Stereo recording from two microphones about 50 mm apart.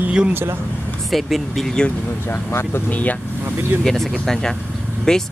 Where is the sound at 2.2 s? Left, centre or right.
Left.